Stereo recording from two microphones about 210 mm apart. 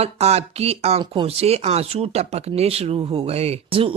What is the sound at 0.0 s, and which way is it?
Speech, 30° right (ahead or behind).